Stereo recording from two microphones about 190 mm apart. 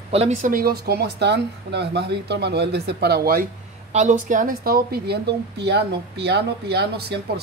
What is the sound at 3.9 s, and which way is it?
Speech, 40° right (ahead or behind).